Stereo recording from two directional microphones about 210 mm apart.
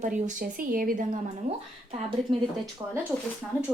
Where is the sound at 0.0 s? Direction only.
40° right (ahead or behind).